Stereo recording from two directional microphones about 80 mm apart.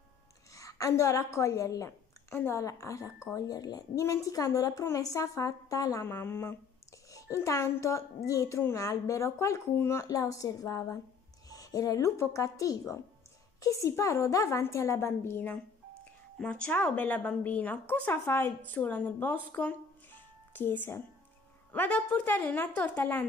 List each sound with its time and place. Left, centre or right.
0.6 s a woman's voice: left
6.0 s a woman's voice: left
7.1 s a woman's voice: left
16.3 s a woman's voice: centre; by 18.5 s left
18.7 s a woman's voice: left